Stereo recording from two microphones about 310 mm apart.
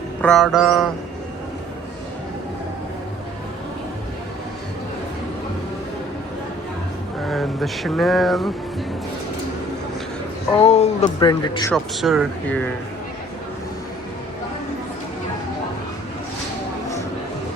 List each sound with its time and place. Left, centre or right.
0.2 s speech: centre
7.3 s a sound: centre
10.6 s speech: left
11.7 s speech: centre